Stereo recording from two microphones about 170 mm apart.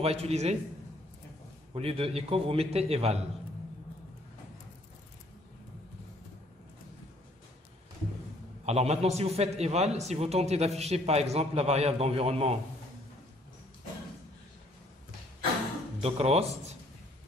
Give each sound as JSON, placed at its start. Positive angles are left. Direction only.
{"t": 0.0, "sound": "a man's voice", "side_deg": -35}
{"t": 1.7, "sound": "a man's voice", "side_deg": -35}
{"t": 8.6, "sound": "a man's voice", "side_deg": -40}
{"t": 16.0, "sound": "a man's voice", "side_deg": -35}